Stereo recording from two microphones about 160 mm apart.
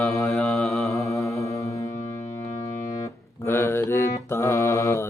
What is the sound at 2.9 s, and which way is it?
Music, 20° left (ahead or behind).